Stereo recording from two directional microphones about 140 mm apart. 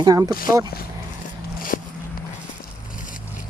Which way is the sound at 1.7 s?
90° left.